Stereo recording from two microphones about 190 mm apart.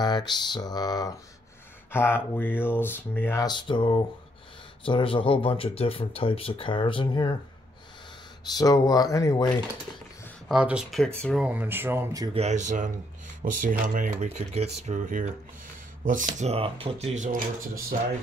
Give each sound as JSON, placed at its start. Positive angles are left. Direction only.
{"t": 0.0, "sound": "speech", "side_deg": 20}
{"t": 8.5, "sound": "speech", "side_deg": 20}
{"t": 10.5, "sound": "speech", "side_deg": -5}
{"t": 11.4, "sound": "speech", "side_deg": -10}
{"t": 12.4, "sound": "speech", "side_deg": -40}